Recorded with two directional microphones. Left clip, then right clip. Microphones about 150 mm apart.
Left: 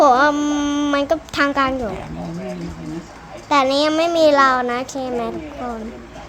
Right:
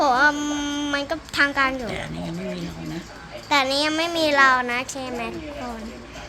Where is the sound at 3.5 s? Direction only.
40° left (ahead or behind).